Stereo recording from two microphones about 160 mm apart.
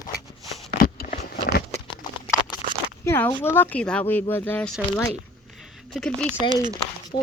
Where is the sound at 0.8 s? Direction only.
65° left (ahead or behind).